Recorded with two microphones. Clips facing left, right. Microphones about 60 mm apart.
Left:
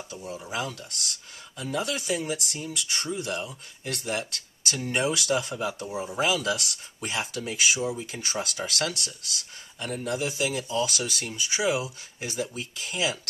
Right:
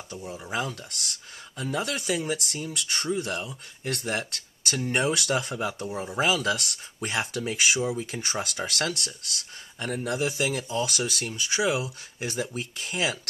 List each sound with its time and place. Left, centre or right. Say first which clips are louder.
0.5 s speech: right 2 dB; right
4.9 s speech: even; right